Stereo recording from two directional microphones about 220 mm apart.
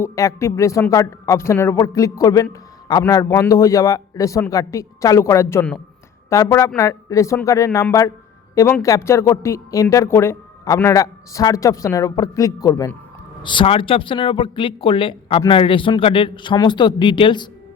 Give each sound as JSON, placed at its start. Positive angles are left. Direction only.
{"t": 0.0, "sound": "a woman's voice", "side_deg": 15}